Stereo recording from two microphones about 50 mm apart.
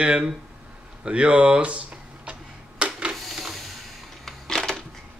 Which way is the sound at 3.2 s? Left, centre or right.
Centre.